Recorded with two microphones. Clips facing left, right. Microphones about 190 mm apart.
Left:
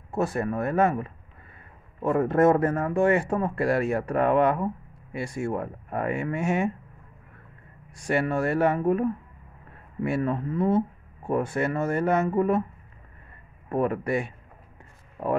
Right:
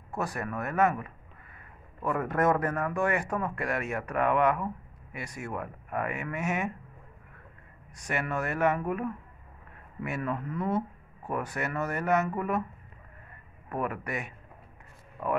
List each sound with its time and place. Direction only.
0.1 s speech: 25° left (ahead or behind)
7.9 s speech: 30° left (ahead or behind)
13.7 s speech: 30° left (ahead or behind)